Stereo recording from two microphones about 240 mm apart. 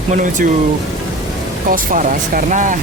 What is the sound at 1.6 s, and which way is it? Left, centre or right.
Speech, right.